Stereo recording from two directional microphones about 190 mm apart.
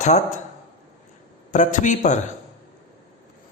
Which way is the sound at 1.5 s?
40° left (ahead or behind).